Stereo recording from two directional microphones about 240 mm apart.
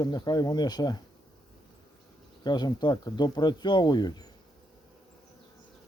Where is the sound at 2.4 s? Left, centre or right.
Centre.